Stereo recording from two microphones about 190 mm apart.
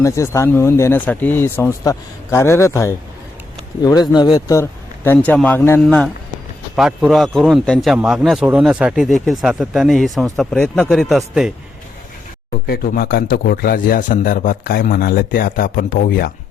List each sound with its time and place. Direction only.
0.0 s speech: 15° left (ahead or behind)
4.1 s a man's voice: 20° left (ahead or behind); by 11.2 s centre (ahead or behind)
12.6 s a man's voice: 50° left (ahead or behind)